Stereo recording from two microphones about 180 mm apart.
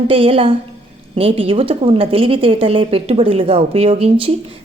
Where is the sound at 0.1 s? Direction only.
30° right (ahead or behind).